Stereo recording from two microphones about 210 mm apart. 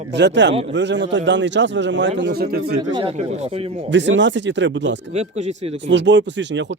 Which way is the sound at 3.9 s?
60° right (ahead or behind).